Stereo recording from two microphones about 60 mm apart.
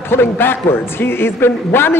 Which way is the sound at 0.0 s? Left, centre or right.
Left.